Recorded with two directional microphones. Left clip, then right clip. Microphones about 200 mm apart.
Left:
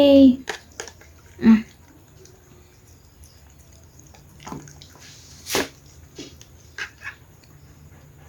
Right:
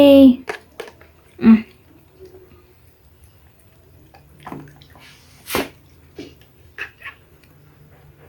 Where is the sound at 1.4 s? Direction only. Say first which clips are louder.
Right 3 dB; 10° right (ahead or behind).